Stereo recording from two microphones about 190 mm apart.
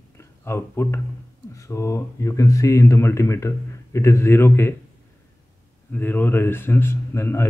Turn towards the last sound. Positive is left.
turn(degrees=15)  # may be behind; listen again after turning